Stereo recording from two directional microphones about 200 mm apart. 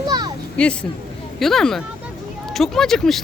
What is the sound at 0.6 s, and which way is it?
Speech, 5° left (ahead or behind).